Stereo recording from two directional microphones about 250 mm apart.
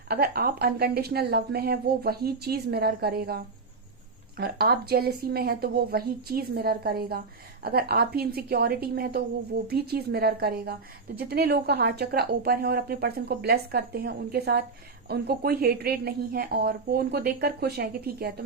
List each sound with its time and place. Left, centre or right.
0.1 s a woman's voice: right